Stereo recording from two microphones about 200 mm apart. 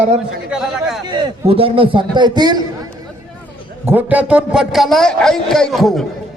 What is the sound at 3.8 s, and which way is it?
A man's voice, 10° right (ahead or behind).